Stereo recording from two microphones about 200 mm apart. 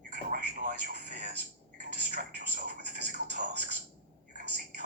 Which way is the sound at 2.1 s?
45° right (ahead or behind).